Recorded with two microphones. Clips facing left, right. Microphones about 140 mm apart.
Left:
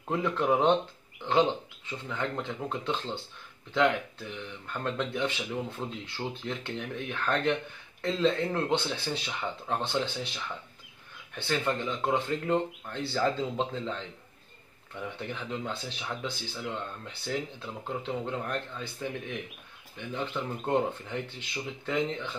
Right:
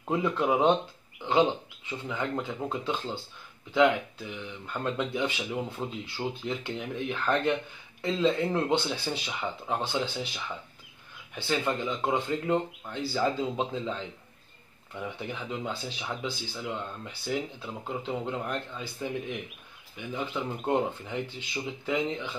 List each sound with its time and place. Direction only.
0.1 s speech: 5° right (ahead or behind)
13.2 s speech: 15° right (ahead or behind)